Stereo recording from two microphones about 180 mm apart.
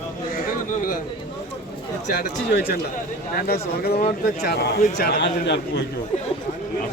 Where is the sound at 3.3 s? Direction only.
60° left (ahead or behind).